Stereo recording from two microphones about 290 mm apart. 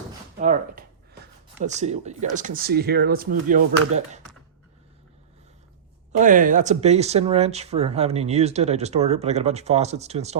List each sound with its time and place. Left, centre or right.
0.3 s speech: right
6.1 s speech: right